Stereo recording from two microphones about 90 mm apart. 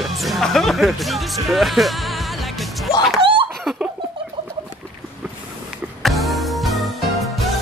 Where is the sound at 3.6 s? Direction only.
Centre (ahead or behind).